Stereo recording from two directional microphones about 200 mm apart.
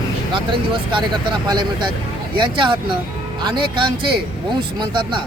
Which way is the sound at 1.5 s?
20° right (ahead or behind).